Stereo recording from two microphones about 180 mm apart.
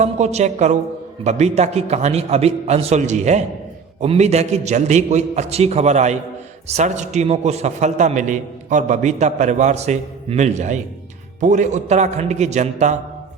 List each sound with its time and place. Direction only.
0.0 s a man's voice: 40° right (ahead or behind)